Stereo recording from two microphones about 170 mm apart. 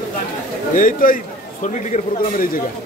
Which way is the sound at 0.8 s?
55° left (ahead or behind).